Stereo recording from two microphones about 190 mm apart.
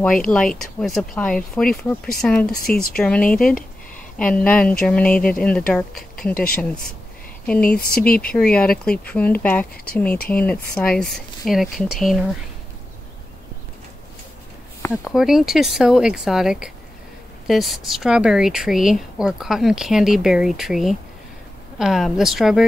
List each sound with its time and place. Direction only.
0.3 s speech: 5° left (ahead or behind)
6.3 s speech: 45° left (ahead or behind)
7.4 s speech: 5° left (ahead or behind)
7.8 s speech: 50° left (ahead or behind)
8.4 s speech: 5° left (ahead or behind)
14.9 s speech: centre (ahead or behind)